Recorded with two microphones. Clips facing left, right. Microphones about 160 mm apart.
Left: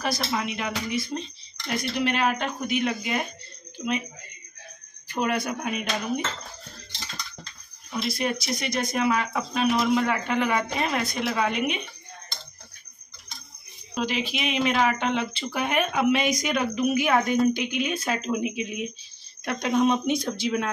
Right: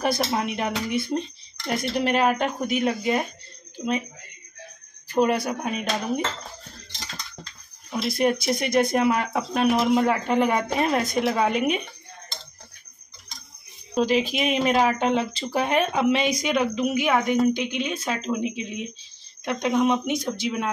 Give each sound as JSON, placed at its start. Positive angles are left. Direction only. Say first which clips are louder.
{"t": 0.0, "sound": "speech", "louder": "right 4 dB", "side_deg": -55}
{"t": 1.7, "sound": "speech", "louder": "right 3 dB", "side_deg": -45}
{"t": 5.1, "sound": "speech", "louder": "right 5 dB", "side_deg": -35}
{"t": 8.0, "sound": "speech", "louder": "right 5 dB", "side_deg": -50}
{"t": 9.9, "sound": "speech", "louder": "right 4 dB", "side_deg": -40}
{"t": 13.9, "sound": "speech", "louder": "right 6 dB", "side_deg": -40}